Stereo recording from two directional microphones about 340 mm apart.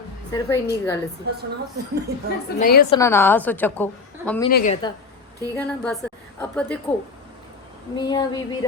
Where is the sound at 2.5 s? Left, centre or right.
Left.